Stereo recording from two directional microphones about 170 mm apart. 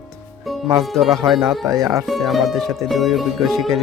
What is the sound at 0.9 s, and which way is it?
Speech, centre (ahead or behind).